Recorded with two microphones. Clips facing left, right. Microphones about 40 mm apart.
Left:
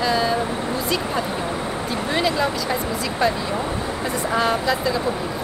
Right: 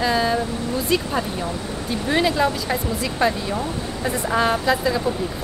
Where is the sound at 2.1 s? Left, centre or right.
Centre.